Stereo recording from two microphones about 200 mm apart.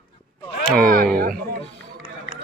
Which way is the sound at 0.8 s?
45° right (ahead or behind).